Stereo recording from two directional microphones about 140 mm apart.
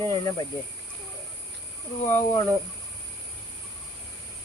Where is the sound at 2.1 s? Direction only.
20° left (ahead or behind).